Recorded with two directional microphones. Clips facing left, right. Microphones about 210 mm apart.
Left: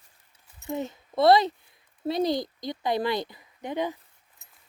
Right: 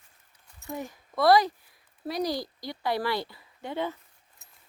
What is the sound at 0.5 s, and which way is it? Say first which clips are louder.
Speech: left 5 dB; 20° left (ahead or behind).